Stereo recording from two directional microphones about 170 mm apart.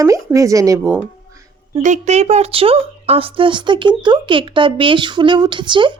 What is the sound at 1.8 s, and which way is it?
A woman's voice, 45° right (ahead or behind).